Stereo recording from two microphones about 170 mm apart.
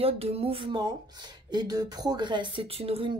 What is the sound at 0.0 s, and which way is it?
Speech, 35° right (ahead or behind).